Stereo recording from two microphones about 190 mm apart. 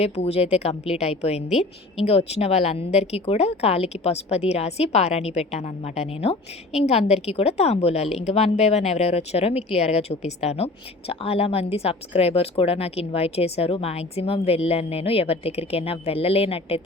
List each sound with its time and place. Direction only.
0.0 s a woman's voice: 35° left (ahead or behind)